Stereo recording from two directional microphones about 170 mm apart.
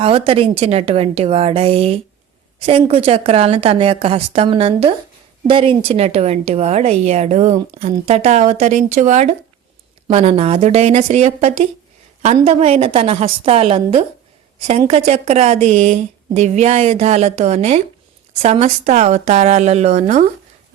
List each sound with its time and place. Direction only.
0.0 s a woman's voice: 35° right (ahead or behind)